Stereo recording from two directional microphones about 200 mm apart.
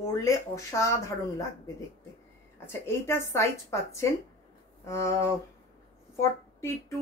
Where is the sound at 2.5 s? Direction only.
10° left (ahead or behind).